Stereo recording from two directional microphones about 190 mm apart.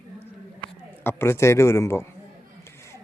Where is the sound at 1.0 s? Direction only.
15° left (ahead or behind).